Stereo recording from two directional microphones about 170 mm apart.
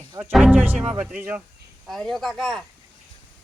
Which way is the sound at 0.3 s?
5° right (ahead or behind).